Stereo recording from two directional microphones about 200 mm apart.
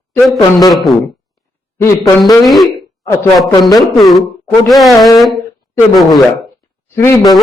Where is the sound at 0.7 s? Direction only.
Centre (ahead or behind).